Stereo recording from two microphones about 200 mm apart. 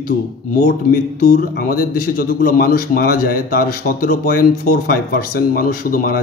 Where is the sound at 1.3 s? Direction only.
50° left (ahead or behind).